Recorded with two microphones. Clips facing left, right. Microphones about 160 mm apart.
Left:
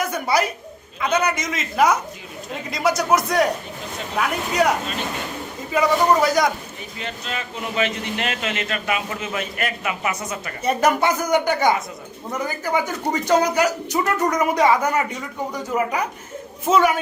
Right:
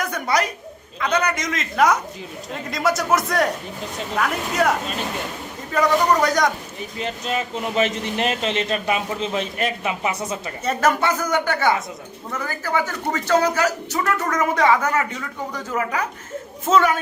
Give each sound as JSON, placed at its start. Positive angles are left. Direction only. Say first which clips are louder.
{"t": 0.0, "sound": "a woman's voice", "louder": "left 1 dB", "side_deg": 5}
{"t": 7.0, "sound": "a man's voice", "louder": "right 5 dB", "side_deg": -40}
{"t": 10.6, "sound": "speech", "louder": "left 2 dB", "side_deg": 15}